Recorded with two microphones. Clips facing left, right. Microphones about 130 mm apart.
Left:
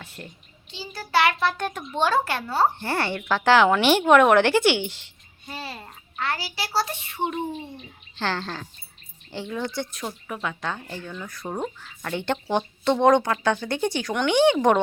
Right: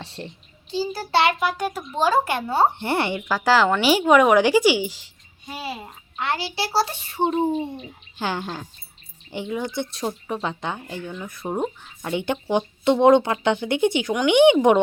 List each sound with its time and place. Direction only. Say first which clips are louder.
0.0 s a child's voice: right 5 dB; 30° right (ahead or behind); by 2.1 s 5° right (ahead or behind)
2.2 s a child's voice: right 3 dB; 20° right (ahead or behind)
3.2 s a child's voice: left 3 dB; 10° right (ahead or behind); by 7.6 s 35° right (ahead or behind)
8.1 s speech: right 1 dB; 15° right (ahead or behind)
9.9 s speech: right 6 dB; 30° right (ahead or behind)